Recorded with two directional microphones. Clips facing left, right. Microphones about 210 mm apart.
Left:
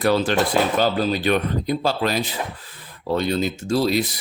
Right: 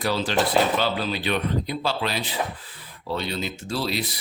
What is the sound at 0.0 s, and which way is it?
Speech, 55° left (ahead or behind).